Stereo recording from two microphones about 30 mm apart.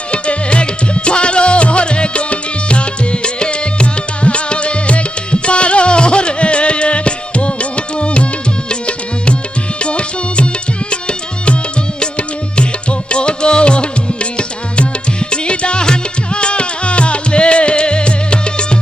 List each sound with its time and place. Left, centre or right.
0.1 s music: left
11.9 s music: left